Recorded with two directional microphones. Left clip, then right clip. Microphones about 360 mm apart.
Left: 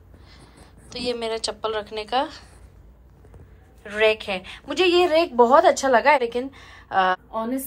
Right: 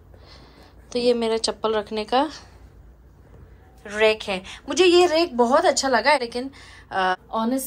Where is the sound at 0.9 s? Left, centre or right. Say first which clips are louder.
Right 6 dB; centre.